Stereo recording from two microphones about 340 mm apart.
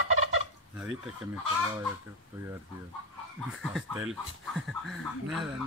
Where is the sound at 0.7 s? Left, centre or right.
Centre.